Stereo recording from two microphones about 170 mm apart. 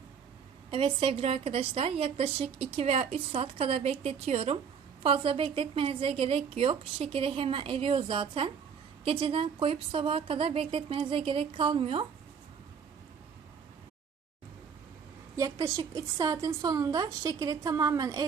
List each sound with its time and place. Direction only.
0.7 s a woman's voice: 35° right (ahead or behind)
15.4 s a woman's voice: 20° right (ahead or behind)